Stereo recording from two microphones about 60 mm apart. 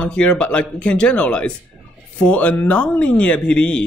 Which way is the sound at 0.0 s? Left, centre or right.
Left.